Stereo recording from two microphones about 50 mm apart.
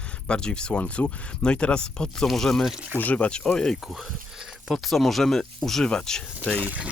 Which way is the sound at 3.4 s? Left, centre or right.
Centre.